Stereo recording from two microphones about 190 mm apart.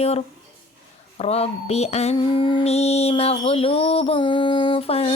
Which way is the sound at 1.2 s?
30° left (ahead or behind).